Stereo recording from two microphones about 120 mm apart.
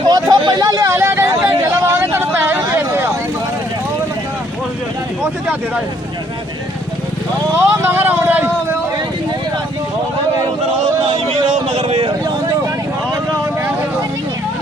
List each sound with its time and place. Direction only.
0.1 s vehicle: 35° right (ahead or behind); by 3.1 s 20° right (ahead or behind)
7.5 s speech: 20° right (ahead or behind)
11.7 s a sound: 60° right (ahead or behind)